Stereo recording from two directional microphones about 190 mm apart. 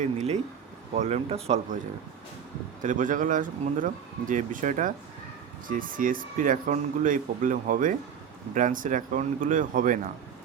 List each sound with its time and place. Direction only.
0.0 s speech: 35° right (ahead or behind)
2.8 s speech: 45° right (ahead or behind)